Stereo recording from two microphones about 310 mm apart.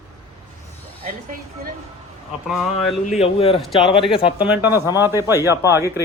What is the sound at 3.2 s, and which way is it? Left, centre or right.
Speech, centre.